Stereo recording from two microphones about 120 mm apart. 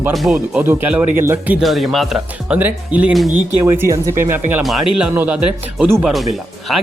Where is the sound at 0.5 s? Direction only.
15° right (ahead or behind).